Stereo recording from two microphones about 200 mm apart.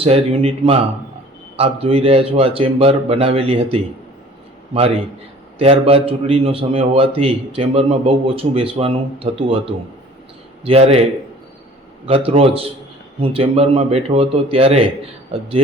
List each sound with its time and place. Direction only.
0.0 s a man's voice: 30° right (ahead or behind)
5.5 s a man's voice: 30° right (ahead or behind)
12.0 s a man's voice: 30° right (ahead or behind)